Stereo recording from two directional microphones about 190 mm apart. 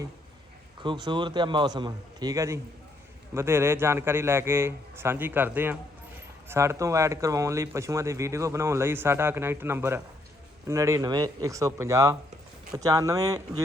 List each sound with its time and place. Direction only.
0.8 s a man's voice: 25° right (ahead or behind)